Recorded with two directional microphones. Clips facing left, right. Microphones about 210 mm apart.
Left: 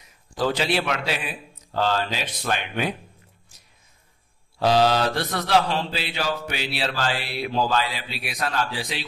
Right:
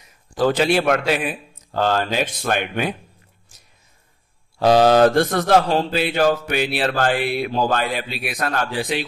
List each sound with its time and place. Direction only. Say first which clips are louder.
0.4 s mantra: right 6 dB; 50° right (ahead or behind)
4.6 s mantra: right 6 dB; 50° right (ahead or behind)